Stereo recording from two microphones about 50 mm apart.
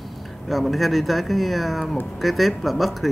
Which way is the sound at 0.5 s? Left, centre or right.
Centre.